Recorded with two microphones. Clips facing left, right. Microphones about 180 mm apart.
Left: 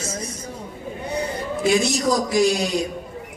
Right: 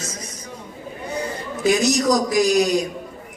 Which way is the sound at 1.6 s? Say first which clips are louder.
Right 2 dB; 30° left (ahead or behind).